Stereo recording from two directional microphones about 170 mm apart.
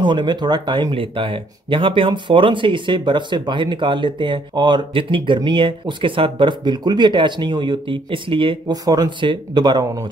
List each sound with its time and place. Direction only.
0.0 s speech: 25° right (ahead or behind)